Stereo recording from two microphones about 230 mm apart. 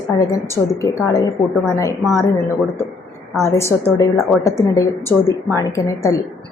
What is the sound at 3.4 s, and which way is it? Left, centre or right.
A woman's voice, centre.